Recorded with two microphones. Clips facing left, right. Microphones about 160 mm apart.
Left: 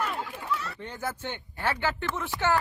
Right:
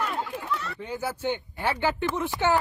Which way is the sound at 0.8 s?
10° right (ahead or behind).